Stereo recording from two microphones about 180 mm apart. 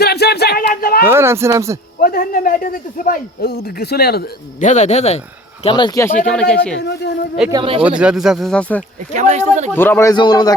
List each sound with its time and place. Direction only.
0.0 s music: 65° left (ahead or behind)
0.6 s a sound: 50° left (ahead or behind)
1.0 s speech: 15° right (ahead or behind)
2.0 s a man's voice: 55° left (ahead or behind)
4.6 s speech: 40° left (ahead or behind)
5.6 s a man's voice: 25° left (ahead or behind)
6.2 s speech: 5° left (ahead or behind)
6.7 s speech: 70° left (ahead or behind)
7.5 s speech: 30° right (ahead or behind)
7.8 s speech: 5° right (ahead or behind)
9.1 s speech: 40° right (ahead or behind)
9.7 s a man's voice: 10° left (ahead or behind)